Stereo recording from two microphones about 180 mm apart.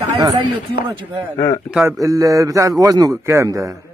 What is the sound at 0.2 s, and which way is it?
Speech, 25° right (ahead or behind).